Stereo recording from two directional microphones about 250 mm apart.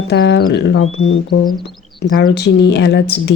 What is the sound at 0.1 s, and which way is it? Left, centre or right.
Speech, left.